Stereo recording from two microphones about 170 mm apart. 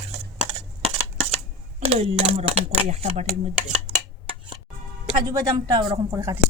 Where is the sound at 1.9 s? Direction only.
35° right (ahead or behind).